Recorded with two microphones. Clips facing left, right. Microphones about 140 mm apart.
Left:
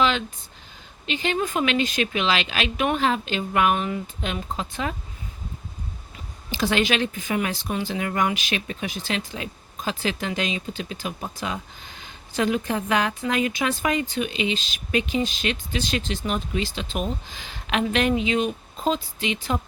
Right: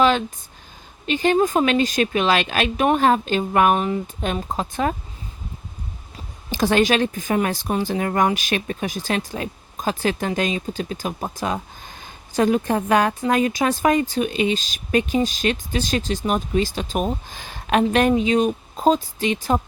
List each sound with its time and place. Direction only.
0.0 s a sound: 45° right (ahead or behind)
1.0 s speech: 45° right (ahead or behind)
6.5 s speech: 45° right (ahead or behind)